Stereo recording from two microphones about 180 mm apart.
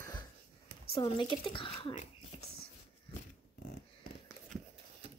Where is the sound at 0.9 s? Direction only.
30° left (ahead or behind).